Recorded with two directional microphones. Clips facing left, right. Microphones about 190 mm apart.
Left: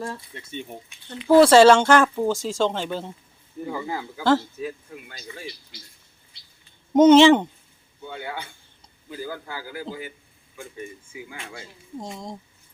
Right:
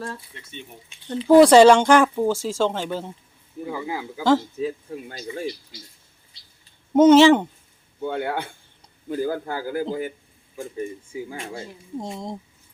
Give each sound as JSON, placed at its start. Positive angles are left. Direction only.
{"t": 1.3, "sound": "speech", "side_deg": -15}
{"t": 4.6, "sound": "speech", "side_deg": -35}
{"t": 6.9, "sound": "speech", "side_deg": -5}
{"t": 8.0, "sound": "a man's voice", "side_deg": -55}
{"t": 10.6, "sound": "speech", "side_deg": -35}
{"t": 11.9, "sound": "speech", "side_deg": -25}